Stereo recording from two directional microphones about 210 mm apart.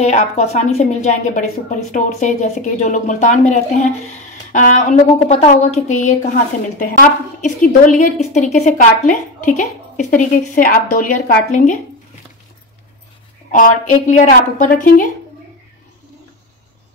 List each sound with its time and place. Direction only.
0.0 s a woman's voice: 35° left (ahead or behind)
13.5 s a woman's voice: 40° left (ahead or behind)